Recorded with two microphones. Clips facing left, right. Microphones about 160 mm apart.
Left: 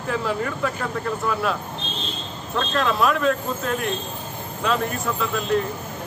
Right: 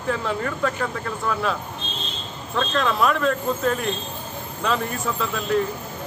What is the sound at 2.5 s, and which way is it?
Speech, centre (ahead or behind).